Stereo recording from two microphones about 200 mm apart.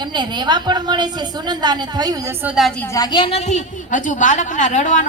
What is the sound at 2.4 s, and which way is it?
A woman's voice, centre (ahead or behind).